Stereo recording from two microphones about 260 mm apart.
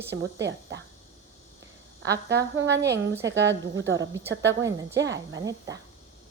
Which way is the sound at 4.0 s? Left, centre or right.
Centre.